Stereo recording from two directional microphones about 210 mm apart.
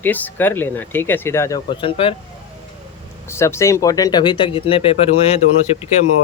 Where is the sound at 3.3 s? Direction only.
10° left (ahead or behind); by 5.4 s 30° left (ahead or behind).